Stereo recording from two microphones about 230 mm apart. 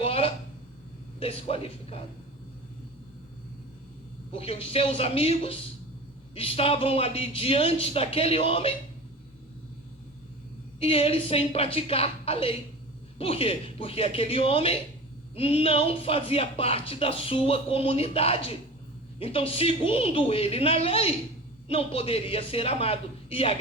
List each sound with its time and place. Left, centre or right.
0.0 s a sound: left
1.2 s speech: left
4.4 s speech: left
10.8 s speech: left